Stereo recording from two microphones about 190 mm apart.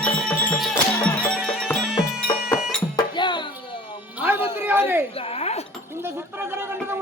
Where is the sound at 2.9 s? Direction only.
25° left (ahead or behind).